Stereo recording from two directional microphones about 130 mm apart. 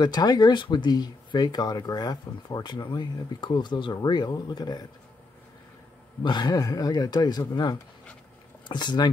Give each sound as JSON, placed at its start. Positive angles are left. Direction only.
{"t": 0.0, "sound": "speech", "side_deg": 30}
{"t": 6.2, "sound": "speech", "side_deg": 35}